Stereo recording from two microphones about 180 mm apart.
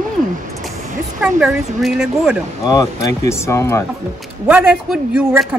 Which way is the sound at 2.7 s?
20° left (ahead or behind).